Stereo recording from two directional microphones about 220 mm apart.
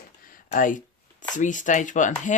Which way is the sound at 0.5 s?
35° left (ahead or behind).